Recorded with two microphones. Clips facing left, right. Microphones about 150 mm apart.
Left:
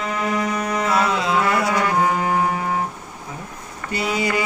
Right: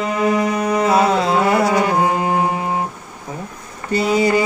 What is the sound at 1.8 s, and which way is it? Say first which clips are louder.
Music: right 2 dB; 20° right (ahead or behind).